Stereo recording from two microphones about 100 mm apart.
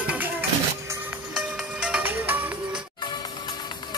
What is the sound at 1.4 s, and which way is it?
Music, 10° right (ahead or behind).